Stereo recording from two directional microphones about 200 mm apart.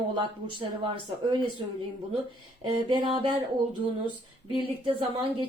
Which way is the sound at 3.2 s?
25° right (ahead or behind).